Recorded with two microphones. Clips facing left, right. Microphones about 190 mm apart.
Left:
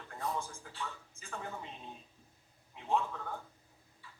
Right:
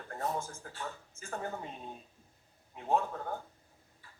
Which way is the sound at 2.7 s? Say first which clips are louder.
Right 2 dB; 45° right (ahead or behind).